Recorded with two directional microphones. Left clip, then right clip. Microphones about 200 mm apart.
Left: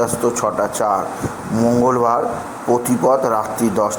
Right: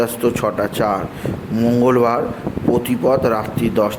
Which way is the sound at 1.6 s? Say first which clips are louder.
Even; 25° right (ahead or behind).